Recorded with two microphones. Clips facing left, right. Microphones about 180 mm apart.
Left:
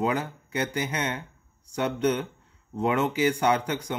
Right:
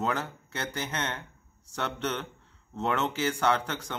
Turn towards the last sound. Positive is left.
turn(degrees=15)  # may be behind; listen again after turning